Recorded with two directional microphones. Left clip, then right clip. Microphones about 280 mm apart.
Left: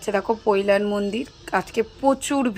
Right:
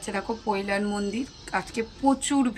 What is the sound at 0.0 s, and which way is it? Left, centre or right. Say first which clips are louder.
Speech: left 8 dB; centre.